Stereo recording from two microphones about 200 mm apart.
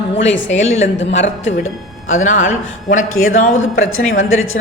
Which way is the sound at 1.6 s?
85° left.